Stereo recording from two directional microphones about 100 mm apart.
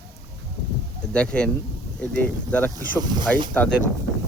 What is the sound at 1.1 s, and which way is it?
Speech, 10° left (ahead or behind).